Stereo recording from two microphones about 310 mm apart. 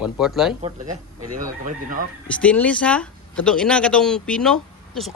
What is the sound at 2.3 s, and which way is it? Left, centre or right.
Speech, centre.